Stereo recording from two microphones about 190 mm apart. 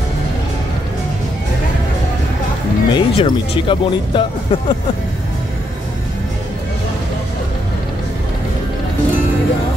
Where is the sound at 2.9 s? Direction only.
25° left (ahead or behind).